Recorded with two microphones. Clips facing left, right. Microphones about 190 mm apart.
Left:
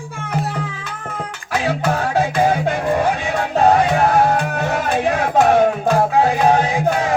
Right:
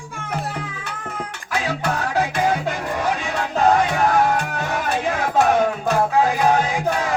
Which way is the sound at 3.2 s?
35° left (ahead or behind).